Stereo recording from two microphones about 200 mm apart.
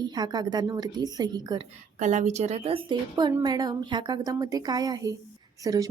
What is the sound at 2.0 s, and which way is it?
A woman's voice, 35° right (ahead or behind).